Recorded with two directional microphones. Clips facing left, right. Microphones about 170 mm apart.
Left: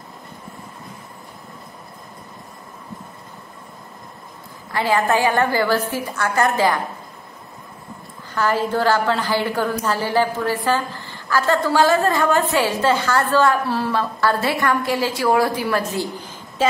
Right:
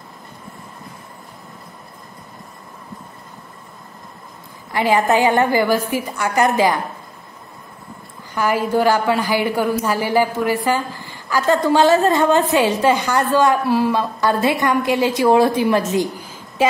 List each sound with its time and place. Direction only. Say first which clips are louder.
4.7 s a woman's voice: right 3 dB; 15° right (ahead or behind)
8.4 s a woman's voice: right 2 dB; 10° right (ahead or behind)